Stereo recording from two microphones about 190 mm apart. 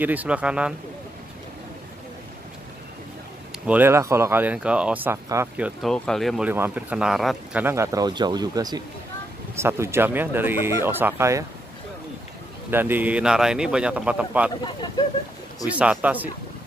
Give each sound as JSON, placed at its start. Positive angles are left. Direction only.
{"t": 0.0, "sound": "speech", "side_deg": -10}
{"t": 3.6, "sound": "speech", "side_deg": -10}
{"t": 5.8, "sound": "speech", "side_deg": 0}
{"t": 7.6, "sound": "speech", "side_deg": -15}
{"t": 12.7, "sound": "speech", "side_deg": -10}
{"t": 15.6, "sound": "speech", "side_deg": -5}